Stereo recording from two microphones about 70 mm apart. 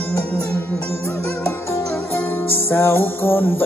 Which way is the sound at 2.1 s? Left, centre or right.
Left.